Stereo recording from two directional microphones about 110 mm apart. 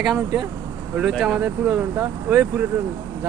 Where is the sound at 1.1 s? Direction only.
5° right (ahead or behind).